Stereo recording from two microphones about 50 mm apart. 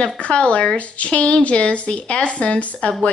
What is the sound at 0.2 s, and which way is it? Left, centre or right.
A woman's voice, left.